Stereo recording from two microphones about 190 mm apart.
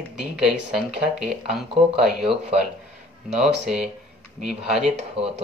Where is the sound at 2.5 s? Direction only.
30° right (ahead or behind).